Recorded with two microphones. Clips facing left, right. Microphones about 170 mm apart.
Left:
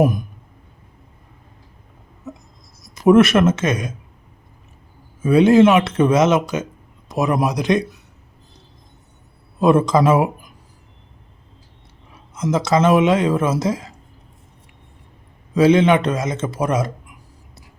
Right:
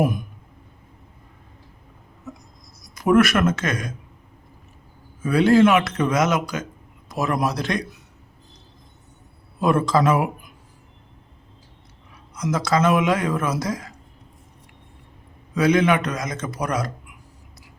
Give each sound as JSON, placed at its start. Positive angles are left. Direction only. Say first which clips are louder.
{"t": 2.9, "sound": "speech", "louder": "left 5 dB", "side_deg": 25}
{"t": 5.2, "sound": "speech", "louder": "left 4 dB", "side_deg": 20}
{"t": 9.6, "sound": "speech", "louder": "left 5 dB", "side_deg": 25}
{"t": 12.3, "sound": "speech", "louder": "left 4 dB", "side_deg": 25}
{"t": 15.5, "sound": "speech", "louder": "left 5 dB", "side_deg": 25}